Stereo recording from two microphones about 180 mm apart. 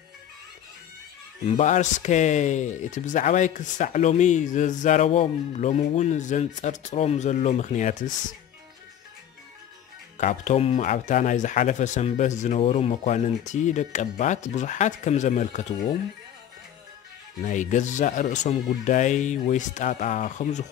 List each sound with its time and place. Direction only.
1.4 s speech: 35° left (ahead or behind)
10.1 s speech: 40° left (ahead or behind)
17.4 s speech: 45° left (ahead or behind)